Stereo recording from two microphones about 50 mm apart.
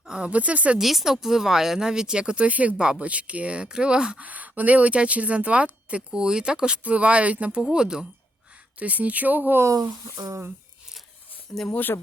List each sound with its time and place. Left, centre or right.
0.1 s speech: right
0.8 s speech: centre; by 2.7 s right
2.7 s speech: centre
4.2 s speech: right
6.1 s speech: centre
7.6 s speech: centre
8.8 s speech: right
11.7 s speech: left